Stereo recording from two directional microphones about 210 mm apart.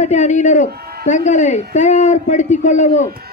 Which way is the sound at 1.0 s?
35° left (ahead or behind).